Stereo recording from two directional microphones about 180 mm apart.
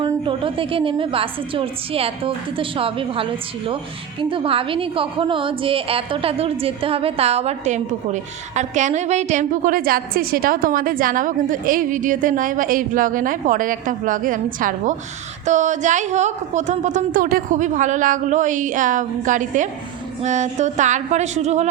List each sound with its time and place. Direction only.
0.0 s a woman's voice: 30° right (ahead or behind)